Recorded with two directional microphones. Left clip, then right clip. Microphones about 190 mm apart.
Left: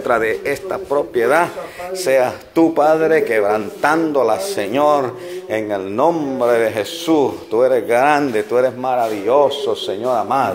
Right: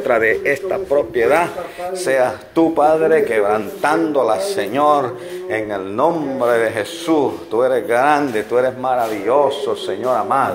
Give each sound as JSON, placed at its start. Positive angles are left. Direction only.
{"t": 0.0, "sound": "a man's voice", "side_deg": 20}
{"t": 1.1, "sound": "a man's voice", "side_deg": 30}
{"t": 2.0, "sound": "a man's voice", "side_deg": 45}